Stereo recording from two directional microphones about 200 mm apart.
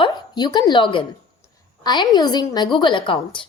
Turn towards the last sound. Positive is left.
turn(degrees=25)  # may be behind; listen again after turning